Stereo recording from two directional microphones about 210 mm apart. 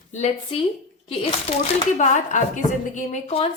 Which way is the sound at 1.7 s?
35° left (ahead or behind).